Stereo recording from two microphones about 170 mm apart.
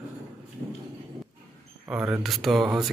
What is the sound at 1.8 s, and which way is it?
Speech, 10° right (ahead or behind).